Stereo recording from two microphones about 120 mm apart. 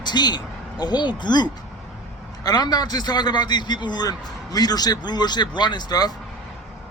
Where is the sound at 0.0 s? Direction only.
35° left (ahead or behind).